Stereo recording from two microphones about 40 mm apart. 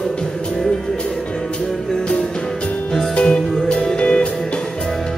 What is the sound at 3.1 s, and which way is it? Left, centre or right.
Music, left.